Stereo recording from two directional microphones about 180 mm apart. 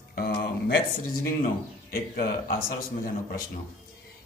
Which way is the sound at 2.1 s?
55° left (ahead or behind).